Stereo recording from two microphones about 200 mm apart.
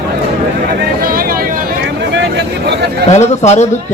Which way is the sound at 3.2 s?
35° left (ahead or behind).